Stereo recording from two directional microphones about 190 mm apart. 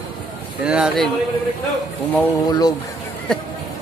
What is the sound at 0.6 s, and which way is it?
Speech, 5° right (ahead or behind).